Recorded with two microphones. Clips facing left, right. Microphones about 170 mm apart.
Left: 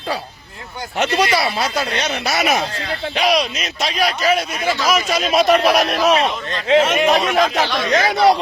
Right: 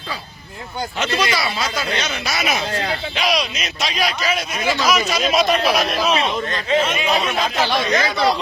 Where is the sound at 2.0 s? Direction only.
35° left (ahead or behind); by 4.1 s 50° left (ahead or behind).